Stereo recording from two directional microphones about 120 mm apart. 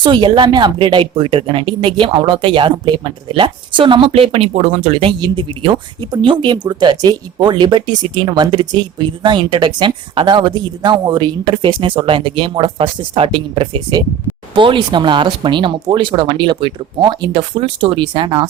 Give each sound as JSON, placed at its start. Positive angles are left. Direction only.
{"t": 0.0, "sound": "speech", "side_deg": -40}
{"t": 5.2, "sound": "speech", "side_deg": -45}